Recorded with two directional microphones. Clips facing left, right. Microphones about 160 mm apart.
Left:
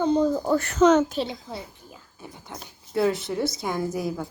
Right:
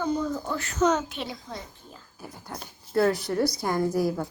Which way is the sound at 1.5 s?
10° left (ahead or behind).